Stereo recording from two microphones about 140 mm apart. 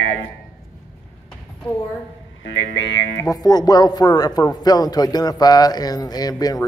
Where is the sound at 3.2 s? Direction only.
25° left (ahead or behind).